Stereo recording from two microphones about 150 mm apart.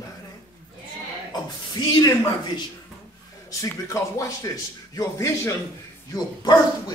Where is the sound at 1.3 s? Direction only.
25° left (ahead or behind).